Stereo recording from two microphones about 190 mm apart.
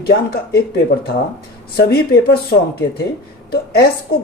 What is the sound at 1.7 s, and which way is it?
A woman's voice, 55° left (ahead or behind).